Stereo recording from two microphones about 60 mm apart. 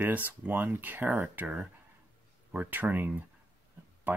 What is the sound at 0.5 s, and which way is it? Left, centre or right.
Speech, right.